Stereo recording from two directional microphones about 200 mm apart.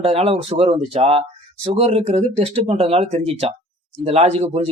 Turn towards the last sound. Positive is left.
turn(degrees=-30)  # may be behind; listen again after turning